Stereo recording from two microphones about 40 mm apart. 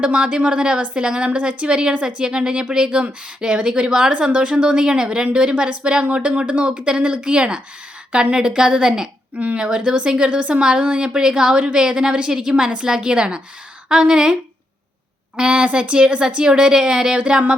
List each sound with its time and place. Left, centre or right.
0.0 s a woman's voice: right
6.8 s a woman's voice: right
15.4 s a woman's voice: right